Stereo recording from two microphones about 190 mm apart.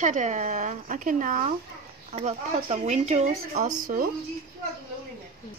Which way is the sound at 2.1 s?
35° right (ahead or behind).